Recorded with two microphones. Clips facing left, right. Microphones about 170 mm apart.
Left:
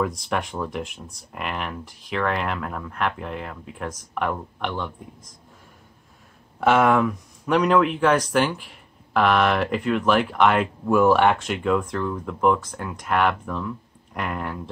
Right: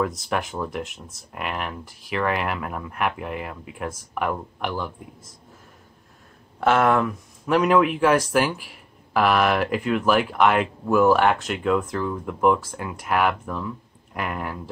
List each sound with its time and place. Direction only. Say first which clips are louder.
0.0 s speech: even; centre (ahead or behind)
6.6 s speech: left 1 dB; centre (ahead or behind)